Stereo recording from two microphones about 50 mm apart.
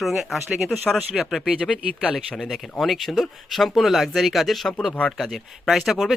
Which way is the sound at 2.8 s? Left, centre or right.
Centre.